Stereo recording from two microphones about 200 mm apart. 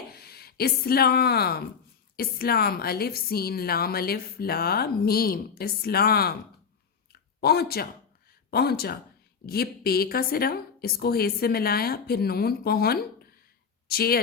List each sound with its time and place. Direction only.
0.1 s a woman's voice: 50° left (ahead or behind)
7.1 s a sound: 50° left (ahead or behind)
8.4 s a woman's voice: 50° left (ahead or behind)